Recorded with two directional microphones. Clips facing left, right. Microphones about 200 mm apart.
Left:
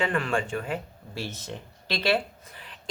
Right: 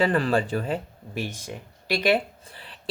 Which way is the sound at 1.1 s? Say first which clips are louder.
Right 3 dB; 15° right (ahead or behind).